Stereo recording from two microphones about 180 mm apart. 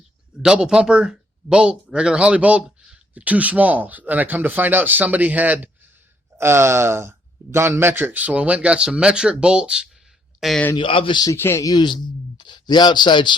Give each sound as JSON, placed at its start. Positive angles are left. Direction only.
{"t": 0.4, "sound": "speech", "side_deg": -5}
{"t": 10.8, "sound": "speech", "side_deg": 30}
{"t": 11.3, "sound": "speech", "side_deg": 15}